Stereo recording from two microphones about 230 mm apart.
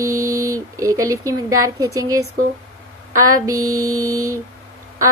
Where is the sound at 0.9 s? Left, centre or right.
Centre.